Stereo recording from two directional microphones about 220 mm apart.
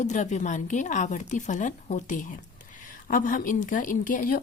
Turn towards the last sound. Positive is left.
turn(degrees=40)  # may be behind; listen again after turning